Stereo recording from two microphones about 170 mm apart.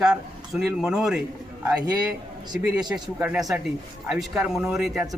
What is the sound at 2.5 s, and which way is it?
Speech, 5° right (ahead or behind).